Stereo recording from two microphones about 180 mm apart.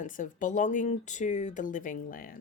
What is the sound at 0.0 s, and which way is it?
Speech, 45° left (ahead or behind).